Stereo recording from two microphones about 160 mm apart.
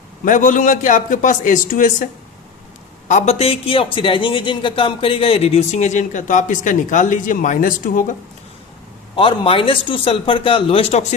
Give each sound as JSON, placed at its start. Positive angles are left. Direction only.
{"t": 0.3, "sound": "a man's voice", "side_deg": 55}
{"t": 3.1, "sound": "a man's voice", "side_deg": 45}
{"t": 9.1, "sound": "a man's voice", "side_deg": 35}